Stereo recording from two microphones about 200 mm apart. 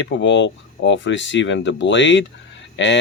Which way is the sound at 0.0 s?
65° left (ahead or behind).